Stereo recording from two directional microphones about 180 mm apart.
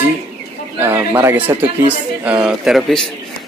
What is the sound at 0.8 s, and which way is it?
A man's voice, 15° right (ahead or behind).